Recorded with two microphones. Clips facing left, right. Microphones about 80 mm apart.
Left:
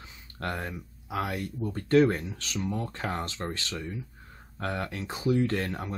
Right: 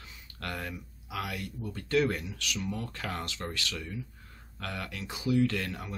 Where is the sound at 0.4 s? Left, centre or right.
Left.